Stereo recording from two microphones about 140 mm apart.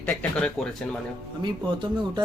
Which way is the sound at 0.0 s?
10° left (ahead or behind).